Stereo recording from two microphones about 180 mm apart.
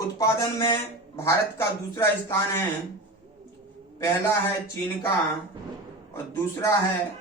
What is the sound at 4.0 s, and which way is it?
Speech, 15° left (ahead or behind).